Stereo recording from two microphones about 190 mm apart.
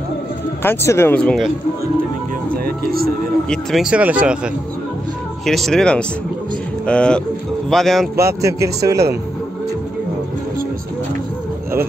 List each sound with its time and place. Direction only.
0.6 s speech: 15° left (ahead or behind)
2.5 s music: 50° right (ahead or behind)
3.4 s speech: centre (ahead or behind)
5.4 s speech: centre (ahead or behind)
8.2 s a man's voice: 15° right (ahead or behind)